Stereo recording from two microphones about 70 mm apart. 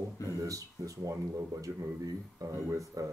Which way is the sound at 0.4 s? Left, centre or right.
Right.